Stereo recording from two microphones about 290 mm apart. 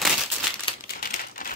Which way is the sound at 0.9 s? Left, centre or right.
Left.